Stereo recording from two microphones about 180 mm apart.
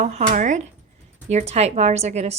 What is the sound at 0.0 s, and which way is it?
A woman's voice, 40° right (ahead or behind).